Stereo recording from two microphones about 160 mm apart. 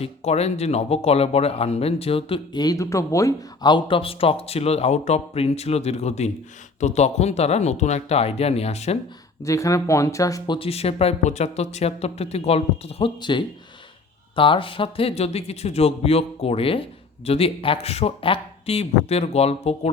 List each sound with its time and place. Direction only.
0.0 s speech: 40° left (ahead or behind)
9.4 s speech: 20° left (ahead or behind); by 19.9 s 40° left (ahead or behind)